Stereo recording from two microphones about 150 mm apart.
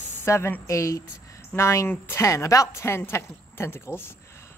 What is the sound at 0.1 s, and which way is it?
Speech, 15° left (ahead or behind).